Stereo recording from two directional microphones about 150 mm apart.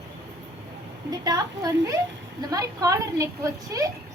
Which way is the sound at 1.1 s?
25° right (ahead or behind).